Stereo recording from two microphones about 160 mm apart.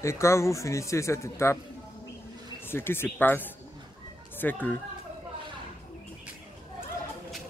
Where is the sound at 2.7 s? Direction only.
15° left (ahead or behind).